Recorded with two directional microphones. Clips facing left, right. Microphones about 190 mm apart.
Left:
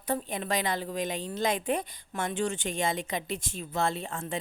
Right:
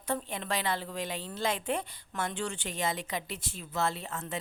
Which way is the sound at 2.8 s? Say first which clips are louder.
Left 1 dB; 25° left (ahead or behind).